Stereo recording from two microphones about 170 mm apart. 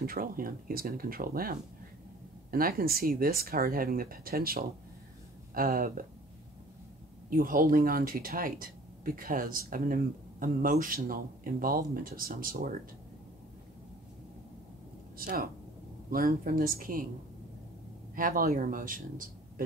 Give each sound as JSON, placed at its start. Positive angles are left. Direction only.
{"t": 0.0, "sound": "speech", "side_deg": -55}
{"t": 7.2, "sound": "speech", "side_deg": -55}
{"t": 15.1, "sound": "speech", "side_deg": -60}
{"t": 18.1, "sound": "speech", "side_deg": -55}